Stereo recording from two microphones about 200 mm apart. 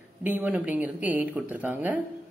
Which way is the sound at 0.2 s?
10° right (ahead or behind).